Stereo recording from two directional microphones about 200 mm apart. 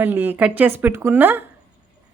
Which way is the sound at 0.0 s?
10° right (ahead or behind).